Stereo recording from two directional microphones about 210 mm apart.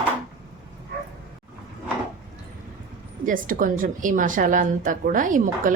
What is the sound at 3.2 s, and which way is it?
Speech, 40° right (ahead or behind).